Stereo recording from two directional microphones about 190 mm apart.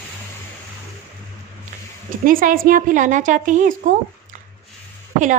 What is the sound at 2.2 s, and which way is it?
A woman's voice, 45° right (ahead or behind).